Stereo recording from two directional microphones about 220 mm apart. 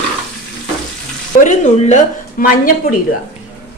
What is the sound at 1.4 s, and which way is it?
A woman's voice, 35° left (ahead or behind).